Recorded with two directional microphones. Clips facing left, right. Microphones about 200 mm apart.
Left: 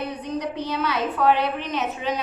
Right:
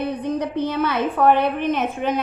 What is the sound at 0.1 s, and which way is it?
A woman's voice, 55° right (ahead or behind).